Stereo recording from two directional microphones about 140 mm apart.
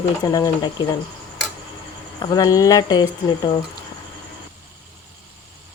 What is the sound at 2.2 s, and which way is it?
Speech, 30° left (ahead or behind).